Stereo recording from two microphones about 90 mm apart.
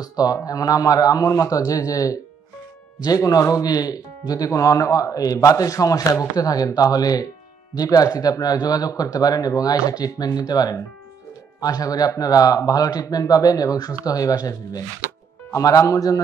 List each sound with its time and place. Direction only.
0.0 s a man's voice: 45° left (ahead or behind)